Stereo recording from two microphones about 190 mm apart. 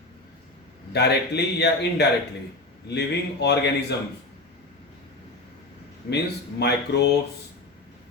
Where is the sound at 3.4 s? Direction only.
60° left (ahead or behind).